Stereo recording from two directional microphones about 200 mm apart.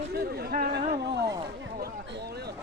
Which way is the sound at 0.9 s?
55° right (ahead or behind).